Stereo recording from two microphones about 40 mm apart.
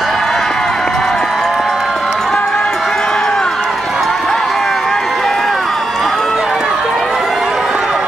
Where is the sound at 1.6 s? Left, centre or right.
Centre.